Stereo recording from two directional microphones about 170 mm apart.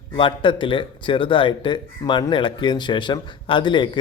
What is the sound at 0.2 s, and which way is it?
Speech, 30° left (ahead or behind).